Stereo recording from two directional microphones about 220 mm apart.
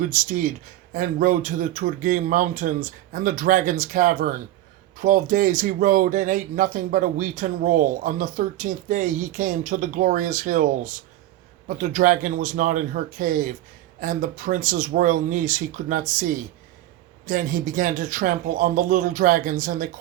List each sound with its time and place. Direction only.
0.0 s speech: 40° right (ahead or behind)